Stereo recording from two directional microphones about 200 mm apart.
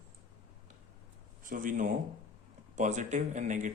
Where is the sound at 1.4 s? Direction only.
40° right (ahead or behind).